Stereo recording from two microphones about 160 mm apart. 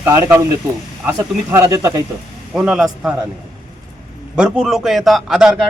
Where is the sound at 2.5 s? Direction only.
5° right (ahead or behind).